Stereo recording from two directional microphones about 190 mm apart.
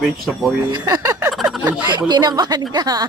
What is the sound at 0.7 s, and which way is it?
Speech, 20° right (ahead or behind).